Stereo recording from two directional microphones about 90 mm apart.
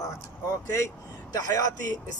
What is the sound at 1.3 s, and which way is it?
Speech, 40° left (ahead or behind).